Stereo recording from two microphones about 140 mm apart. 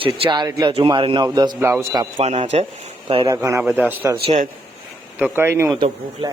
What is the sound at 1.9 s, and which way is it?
Speech, 30° right (ahead or behind).